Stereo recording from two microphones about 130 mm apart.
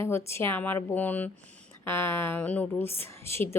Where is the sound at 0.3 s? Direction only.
20° left (ahead or behind).